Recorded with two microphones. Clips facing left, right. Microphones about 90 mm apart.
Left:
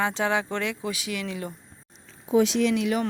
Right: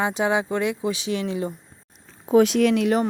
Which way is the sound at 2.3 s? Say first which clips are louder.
Right 4 dB; 55° right (ahead or behind).